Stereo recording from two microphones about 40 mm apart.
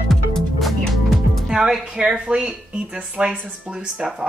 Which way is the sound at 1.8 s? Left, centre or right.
Right.